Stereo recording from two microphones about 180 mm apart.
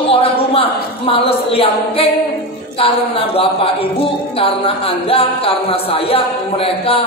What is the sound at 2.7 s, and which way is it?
Speech, 30° left (ahead or behind).